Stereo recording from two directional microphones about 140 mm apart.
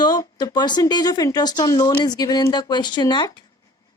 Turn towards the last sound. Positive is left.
turn(degrees=35)  # may be behind; listen again after turning